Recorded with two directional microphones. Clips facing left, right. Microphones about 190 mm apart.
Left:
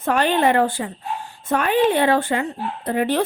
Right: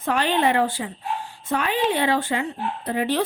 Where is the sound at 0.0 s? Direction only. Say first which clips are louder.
Left 3 dB; 50° left (ahead or behind).